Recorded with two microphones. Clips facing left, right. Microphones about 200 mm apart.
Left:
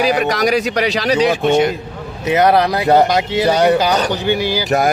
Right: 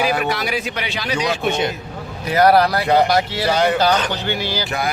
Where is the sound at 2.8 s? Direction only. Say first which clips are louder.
Left 4 dB; 40° left (ahead or behind).